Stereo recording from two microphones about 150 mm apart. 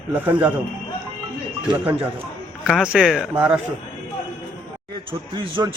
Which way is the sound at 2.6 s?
5° right (ahead or behind).